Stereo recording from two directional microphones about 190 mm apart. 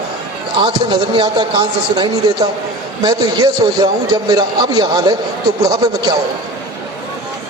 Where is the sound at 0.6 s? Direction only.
25° right (ahead or behind).